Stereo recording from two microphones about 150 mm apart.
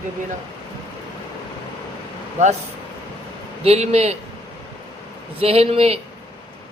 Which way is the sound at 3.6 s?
45° right (ahead or behind).